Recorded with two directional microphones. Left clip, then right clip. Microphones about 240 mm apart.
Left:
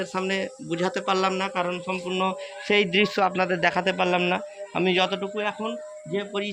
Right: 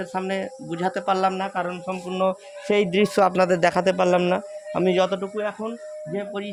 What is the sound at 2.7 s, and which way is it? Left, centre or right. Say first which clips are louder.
A man's voice: right 1 dB; right.